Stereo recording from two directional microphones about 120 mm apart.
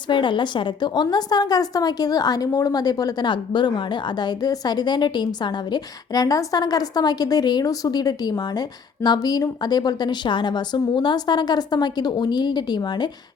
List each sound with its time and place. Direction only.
0.1 s a woman's voice: 40° left (ahead or behind)